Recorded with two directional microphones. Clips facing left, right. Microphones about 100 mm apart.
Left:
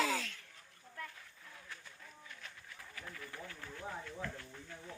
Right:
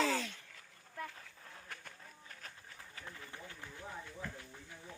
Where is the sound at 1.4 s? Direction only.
45° right (ahead or behind); by 3.8 s 20° right (ahead or behind).